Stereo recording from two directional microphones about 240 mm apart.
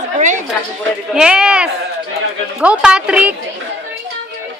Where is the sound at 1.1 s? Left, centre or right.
Centre.